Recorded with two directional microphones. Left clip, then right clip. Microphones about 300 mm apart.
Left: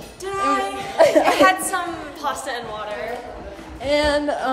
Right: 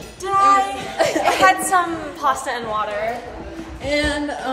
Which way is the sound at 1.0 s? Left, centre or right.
Left.